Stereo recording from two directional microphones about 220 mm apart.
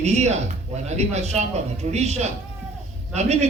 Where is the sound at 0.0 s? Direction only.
30° right (ahead or behind).